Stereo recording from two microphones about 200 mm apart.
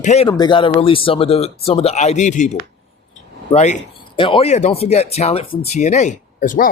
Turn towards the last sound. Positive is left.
turn(degrees=40)  # may be behind; listen again after turning